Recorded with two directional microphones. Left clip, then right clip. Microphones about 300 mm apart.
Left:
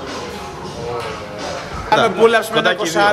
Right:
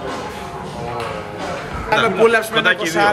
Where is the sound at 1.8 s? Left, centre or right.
Left.